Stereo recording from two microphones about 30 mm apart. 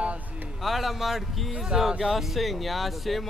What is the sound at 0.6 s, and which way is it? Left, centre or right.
Speech, centre.